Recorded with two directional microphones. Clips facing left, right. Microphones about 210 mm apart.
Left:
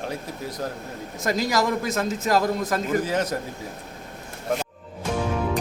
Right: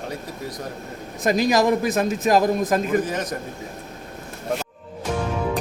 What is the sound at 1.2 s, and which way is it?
A man's voice, 20° right (ahead or behind).